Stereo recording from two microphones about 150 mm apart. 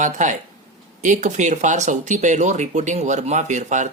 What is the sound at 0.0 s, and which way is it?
Speech, 55° right (ahead or behind).